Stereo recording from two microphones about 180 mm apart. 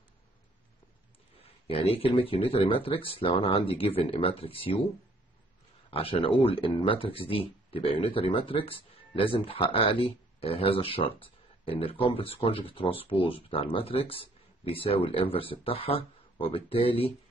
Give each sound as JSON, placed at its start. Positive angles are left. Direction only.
{"t": 1.7, "sound": "speech", "side_deg": 30}
{"t": 5.9, "sound": "speech", "side_deg": 30}